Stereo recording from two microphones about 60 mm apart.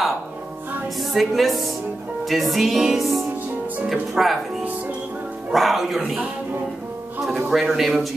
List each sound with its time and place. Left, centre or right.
1.1 s music: centre
5.5 s music: centre
7.5 s music: centre